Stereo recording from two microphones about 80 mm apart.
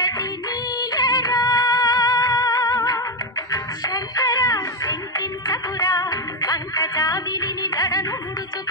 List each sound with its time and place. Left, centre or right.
0.7 s music: left